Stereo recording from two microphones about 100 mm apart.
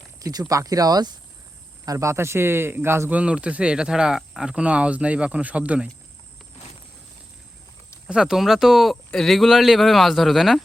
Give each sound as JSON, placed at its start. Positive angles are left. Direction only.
{"t": 0.2, "sound": "speech", "side_deg": -35}
{"t": 3.2, "sound": "speech", "side_deg": -10}
{"t": 8.0, "sound": "speech", "side_deg": -5}